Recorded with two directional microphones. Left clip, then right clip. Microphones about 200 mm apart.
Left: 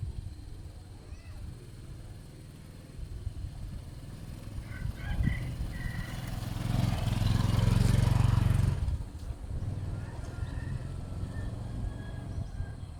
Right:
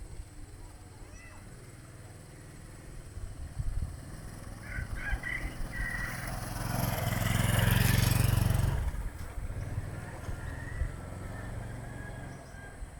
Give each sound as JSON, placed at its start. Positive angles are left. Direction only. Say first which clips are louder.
{"t": 5.2, "sound": "vehicle", "louder": "right 4 dB", "side_deg": 20}
{"t": 7.4, "sound": "vehicle", "louder": "right 6 dB", "side_deg": -40}